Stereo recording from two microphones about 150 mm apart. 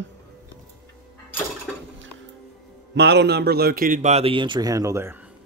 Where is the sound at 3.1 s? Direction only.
90° right; by 4.1 s 65° right (ahead or behind).